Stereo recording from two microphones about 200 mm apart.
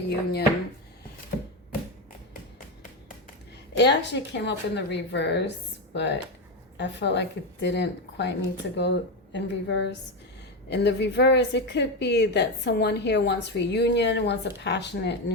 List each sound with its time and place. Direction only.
3.8 s a woman's voice: 60° left (ahead or behind)